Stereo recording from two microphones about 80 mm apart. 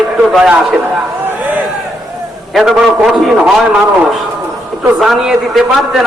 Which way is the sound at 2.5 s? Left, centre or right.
Centre.